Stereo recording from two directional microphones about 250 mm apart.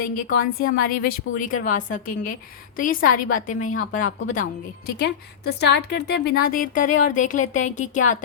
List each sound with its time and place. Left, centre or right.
0.6 s a woman's voice: left